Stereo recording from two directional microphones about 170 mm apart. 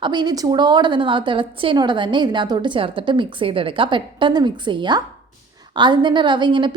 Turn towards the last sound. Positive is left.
turn(degrees=-25)  # may be behind; listen again after turning